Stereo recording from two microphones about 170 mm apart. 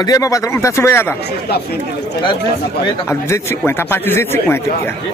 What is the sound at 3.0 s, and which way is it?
A man's voice, 15° left (ahead or behind).